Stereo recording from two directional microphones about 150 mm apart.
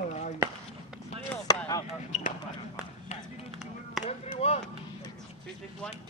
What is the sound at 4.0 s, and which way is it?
Basketball bounce, 50° left (ahead or behind).